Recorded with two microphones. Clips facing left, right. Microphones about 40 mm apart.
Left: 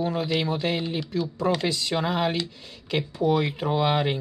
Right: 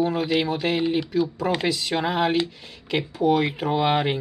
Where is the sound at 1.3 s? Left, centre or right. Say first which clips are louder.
Right 1 dB; right.